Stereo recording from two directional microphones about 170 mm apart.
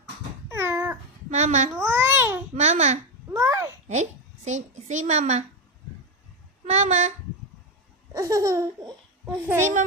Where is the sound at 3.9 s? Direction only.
45° right (ahead or behind).